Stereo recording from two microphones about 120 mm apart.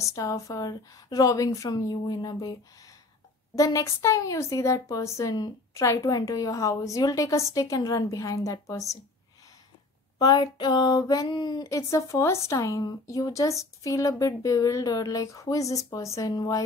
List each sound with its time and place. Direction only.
0.0 s a woman's voice: 30° left (ahead or behind)
3.5 s speech: 30° left (ahead or behind)
10.1 s speech: 30° left (ahead or behind)